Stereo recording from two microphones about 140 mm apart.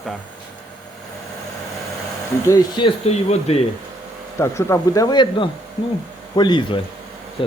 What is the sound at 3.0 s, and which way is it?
Speech, 50° left (ahead or behind).